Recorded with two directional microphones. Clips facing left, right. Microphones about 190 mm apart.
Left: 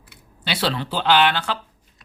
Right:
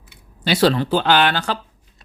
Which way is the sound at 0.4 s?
45° right (ahead or behind).